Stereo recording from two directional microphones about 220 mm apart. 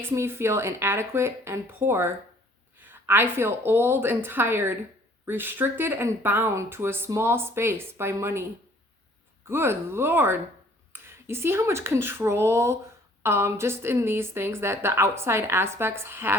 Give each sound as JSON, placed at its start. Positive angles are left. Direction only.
{"t": 0.0, "sound": "speech", "side_deg": -10}